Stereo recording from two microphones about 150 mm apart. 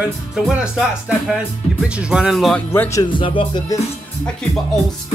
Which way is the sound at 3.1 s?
35° left (ahead or behind).